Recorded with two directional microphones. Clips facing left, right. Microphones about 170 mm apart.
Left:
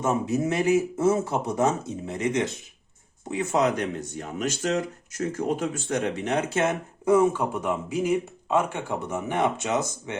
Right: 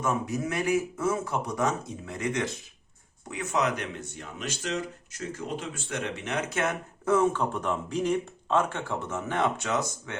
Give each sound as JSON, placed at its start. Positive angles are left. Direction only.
{"t": 0.0, "sound": "speech", "side_deg": 25}
{"t": 4.2, "sound": "speech", "side_deg": 45}
{"t": 7.0, "sound": "speech", "side_deg": 10}